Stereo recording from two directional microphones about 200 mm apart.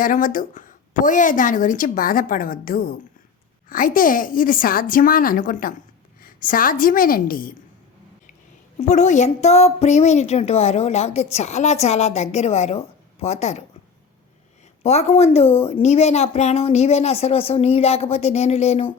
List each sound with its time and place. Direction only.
0.0 s a woman's voice: 40° left (ahead or behind)
8.8 s a woman's voice: 35° left (ahead or behind)
14.8 s a woman's voice: 30° left (ahead or behind)